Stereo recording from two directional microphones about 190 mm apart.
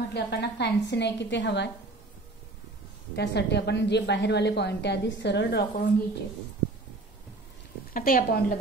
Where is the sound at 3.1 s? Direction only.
60° left (ahead or behind).